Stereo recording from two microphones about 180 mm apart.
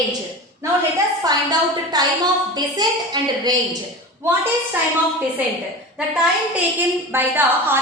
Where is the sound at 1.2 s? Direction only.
20° right (ahead or behind).